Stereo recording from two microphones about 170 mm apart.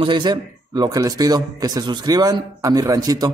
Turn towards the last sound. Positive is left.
turn(degrees=-20)  # may be behind; listen again after turning